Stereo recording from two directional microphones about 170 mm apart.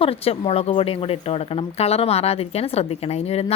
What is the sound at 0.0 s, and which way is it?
Speech, 35° left (ahead or behind).